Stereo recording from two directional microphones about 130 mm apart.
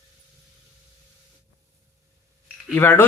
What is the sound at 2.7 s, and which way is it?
Speech, 15° left (ahead or behind).